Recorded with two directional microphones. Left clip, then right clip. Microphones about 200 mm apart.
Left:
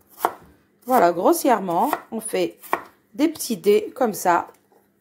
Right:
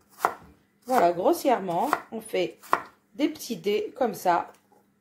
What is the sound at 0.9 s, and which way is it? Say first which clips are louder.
A woman's voice: left 5 dB; 40° left (ahead or behind).